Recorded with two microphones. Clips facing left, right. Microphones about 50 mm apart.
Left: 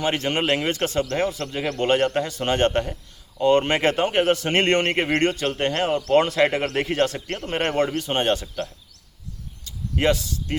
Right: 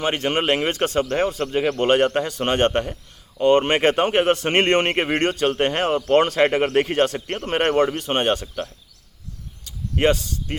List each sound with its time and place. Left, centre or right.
0.0 s a man's voice: centre
1.1 s speech: right
2.5 s a man's voice: right
3.4 s speech: right
4.6 s a man's voice: centre
5.2 s a man's voice: right
6.1 s speech: right
6.6 s a man's voice: right
9.6 s a sound: right